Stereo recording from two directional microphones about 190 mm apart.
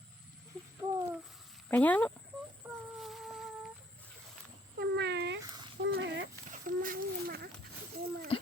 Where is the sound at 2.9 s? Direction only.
Centre (ahead or behind).